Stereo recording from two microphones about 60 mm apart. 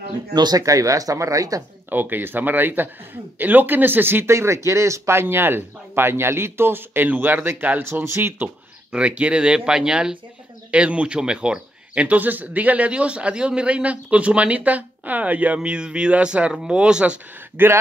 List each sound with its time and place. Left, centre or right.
0.5 s speech: right
1.9 s speech: right
4.3 s speech: right
7.8 s speech: right
8.9 s speech: right
17.6 s speech: right